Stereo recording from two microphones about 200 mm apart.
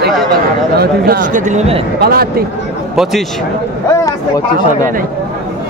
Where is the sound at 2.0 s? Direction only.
50° right (ahead or behind).